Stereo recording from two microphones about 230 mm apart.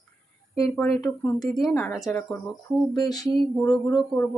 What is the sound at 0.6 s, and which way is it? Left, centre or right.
Speech, centre.